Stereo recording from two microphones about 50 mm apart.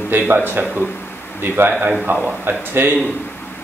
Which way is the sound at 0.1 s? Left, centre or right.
Right.